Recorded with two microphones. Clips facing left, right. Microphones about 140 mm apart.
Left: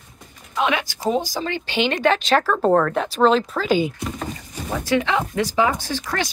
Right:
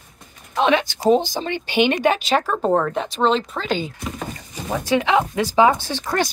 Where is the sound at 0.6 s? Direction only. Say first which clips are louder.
Right 4 dB; 30° right (ahead or behind); by 3.9 s 5° left (ahead or behind).